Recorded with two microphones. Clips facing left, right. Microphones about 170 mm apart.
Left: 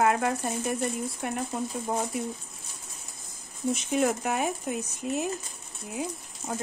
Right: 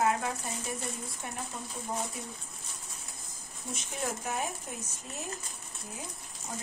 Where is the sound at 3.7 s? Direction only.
75° left (ahead or behind).